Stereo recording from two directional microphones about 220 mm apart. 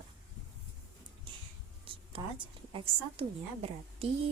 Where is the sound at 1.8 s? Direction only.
25° right (ahead or behind).